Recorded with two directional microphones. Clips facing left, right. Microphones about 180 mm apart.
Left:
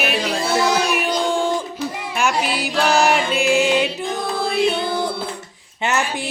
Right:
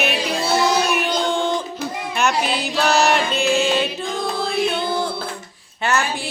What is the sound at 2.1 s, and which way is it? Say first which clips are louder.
Music: right 1 dB; 5° left (ahead or behind).